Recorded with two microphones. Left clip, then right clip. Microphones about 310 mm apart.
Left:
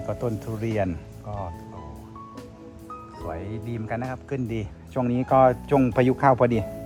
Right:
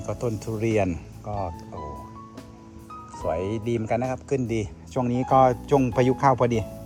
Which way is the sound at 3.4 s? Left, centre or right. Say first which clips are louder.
Right 8 dB; centre.